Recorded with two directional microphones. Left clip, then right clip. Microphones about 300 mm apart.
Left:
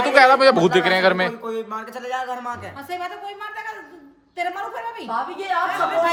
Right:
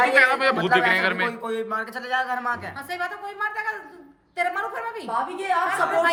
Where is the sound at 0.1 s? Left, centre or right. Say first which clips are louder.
Left 5 dB; centre.